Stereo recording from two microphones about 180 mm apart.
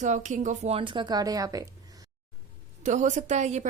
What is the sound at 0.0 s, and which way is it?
Speech, 40° right (ahead or behind).